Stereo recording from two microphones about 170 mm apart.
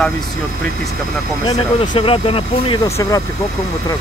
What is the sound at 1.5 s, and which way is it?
Speech, 35° left (ahead or behind).